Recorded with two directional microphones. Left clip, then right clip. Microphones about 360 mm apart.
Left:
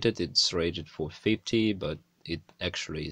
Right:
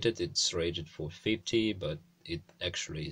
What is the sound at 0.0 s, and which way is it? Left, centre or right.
Speech, centre.